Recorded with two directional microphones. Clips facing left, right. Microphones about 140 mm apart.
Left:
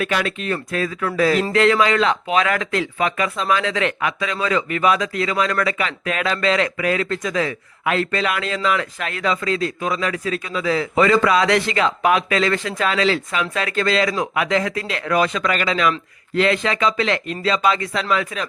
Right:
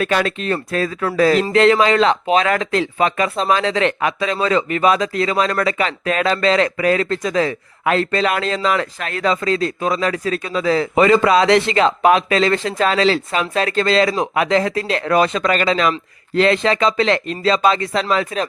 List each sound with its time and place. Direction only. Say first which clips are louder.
0.0 s speech: right 4 dB; 35° right (ahead or behind)
10.9 s speech: right 3 dB; 20° right (ahead or behind)